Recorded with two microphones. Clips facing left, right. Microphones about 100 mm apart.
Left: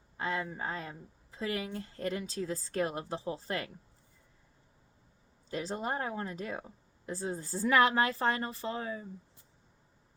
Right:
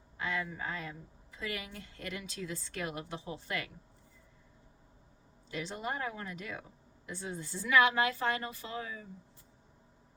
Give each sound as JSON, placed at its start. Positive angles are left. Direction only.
{"t": 0.2, "sound": "speech", "side_deg": 35}
{"t": 5.5, "sound": "speech", "side_deg": 35}